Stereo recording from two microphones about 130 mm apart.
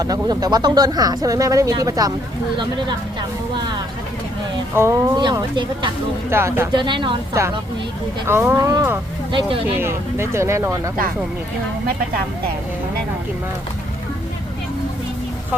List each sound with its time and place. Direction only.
0.0 s speech: 30° right (ahead or behind)
4.7 s speech: 20° right (ahead or behind)
5.1 s speech: 35° right (ahead or behind)
6.3 s speech: 20° right (ahead or behind)
6.7 s speech: 40° right (ahead or behind)
8.3 s speech: 20° right (ahead or behind)
9.3 s speech: 40° right (ahead or behind)
9.7 s speech: 20° right (ahead or behind)